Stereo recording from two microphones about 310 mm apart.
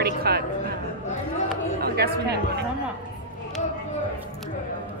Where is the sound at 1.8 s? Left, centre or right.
Right.